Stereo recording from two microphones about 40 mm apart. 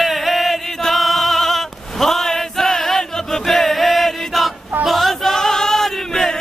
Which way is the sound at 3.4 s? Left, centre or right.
Centre.